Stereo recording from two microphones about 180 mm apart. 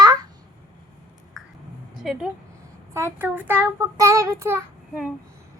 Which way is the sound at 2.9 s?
15° right (ahead or behind).